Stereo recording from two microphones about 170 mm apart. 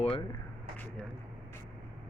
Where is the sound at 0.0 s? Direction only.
35° left (ahead or behind).